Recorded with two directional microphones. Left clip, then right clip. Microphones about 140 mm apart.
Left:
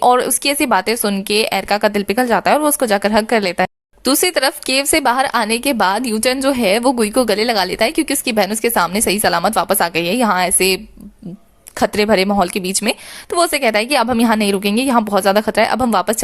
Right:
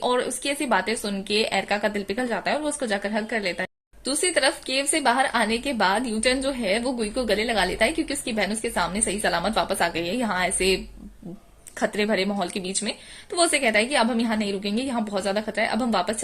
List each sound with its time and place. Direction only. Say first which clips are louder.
0.0 s speech: left 11 dB; 40° left (ahead or behind)
11.8 s speech: left 10 dB; 40° left (ahead or behind)